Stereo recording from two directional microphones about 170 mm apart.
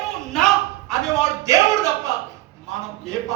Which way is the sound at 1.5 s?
20° right (ahead or behind).